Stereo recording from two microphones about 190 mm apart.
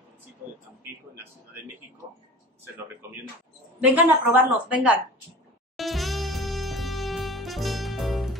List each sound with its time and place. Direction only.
3.8 s a woman's voice: 10° right (ahead or behind)
5.8 s music: centre (ahead or behind)